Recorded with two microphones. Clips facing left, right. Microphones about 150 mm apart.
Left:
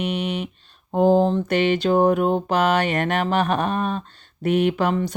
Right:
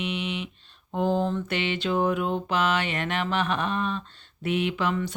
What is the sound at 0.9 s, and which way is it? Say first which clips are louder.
Speech: left 8 dB; 40° left (ahead or behind).